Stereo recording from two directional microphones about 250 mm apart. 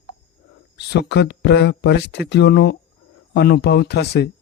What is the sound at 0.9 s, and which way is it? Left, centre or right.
Speech, left.